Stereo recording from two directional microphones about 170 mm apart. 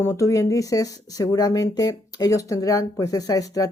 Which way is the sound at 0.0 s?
15° left (ahead or behind).